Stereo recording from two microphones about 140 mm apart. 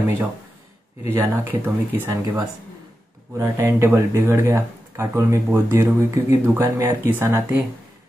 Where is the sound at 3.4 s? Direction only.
15° right (ahead or behind).